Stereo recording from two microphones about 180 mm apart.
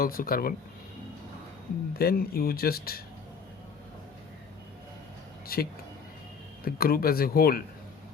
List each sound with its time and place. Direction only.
0.0 s speech: 55° left (ahead or behind)
1.9 s speech: 55° left (ahead or behind)
5.5 s speech: 55° left (ahead or behind)
6.7 s speech: 55° left (ahead or behind)